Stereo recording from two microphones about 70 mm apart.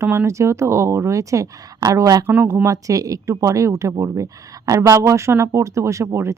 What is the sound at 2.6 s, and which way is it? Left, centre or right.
Speech, right.